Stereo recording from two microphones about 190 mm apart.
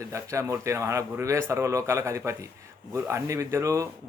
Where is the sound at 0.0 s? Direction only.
15° right (ahead or behind).